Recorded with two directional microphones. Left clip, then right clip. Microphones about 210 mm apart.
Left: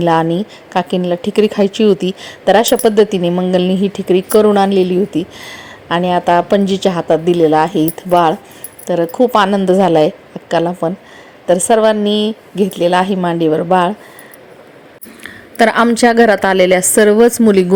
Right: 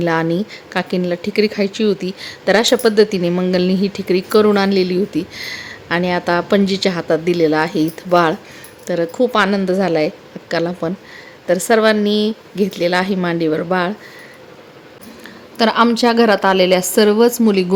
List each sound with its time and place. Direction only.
0.0 s a woman's voice: 10° left (ahead or behind)
15.2 s a woman's voice: 20° left (ahead or behind)